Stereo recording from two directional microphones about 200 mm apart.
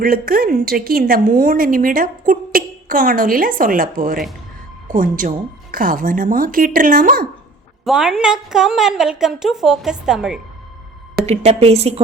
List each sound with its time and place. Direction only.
0.0 s a woman's voice: 45° right (ahead or behind)
7.9 s a woman's voice: 5° right (ahead or behind)
11.3 s a woman's voice: 30° right (ahead or behind)